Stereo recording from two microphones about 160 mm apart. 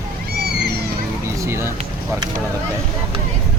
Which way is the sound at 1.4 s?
15° right (ahead or behind).